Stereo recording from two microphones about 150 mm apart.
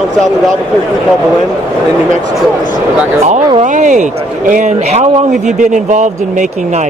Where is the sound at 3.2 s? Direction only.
50° right (ahead or behind).